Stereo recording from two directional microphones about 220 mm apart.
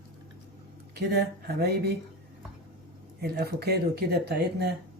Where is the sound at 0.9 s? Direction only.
45° right (ahead or behind).